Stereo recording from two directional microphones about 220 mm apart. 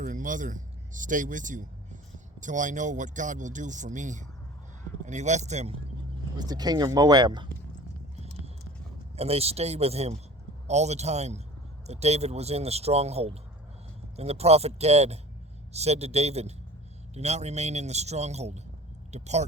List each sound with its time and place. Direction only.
0.0 s speech: 35° right (ahead or behind)
6.4 s speech: 20° right (ahead or behind)
9.1 s speech: 30° right (ahead or behind)